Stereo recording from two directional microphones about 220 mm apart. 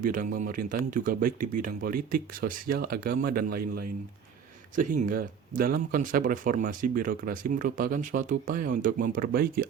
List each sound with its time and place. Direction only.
0.0 s speech: 40° right (ahead or behind)